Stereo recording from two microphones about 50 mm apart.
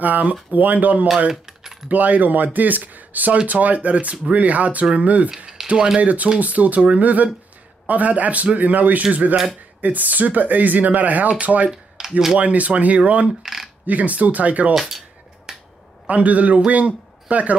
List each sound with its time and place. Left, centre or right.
0.0 s speech: right
1.3 s a sound: centre
1.9 s speech: right
5.6 s a sound: centre
5.9 s speech: right
11.7 s speech: centre
12.4 s speech: right
13.4 s a sound: centre
13.8 s speech: right
14.7 s cutlery: centre
15.5 s finger snapping: centre
16.1 s a man's voice: right